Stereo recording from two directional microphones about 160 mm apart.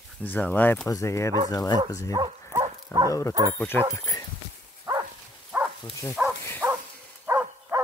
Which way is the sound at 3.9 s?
20° left (ahead or behind).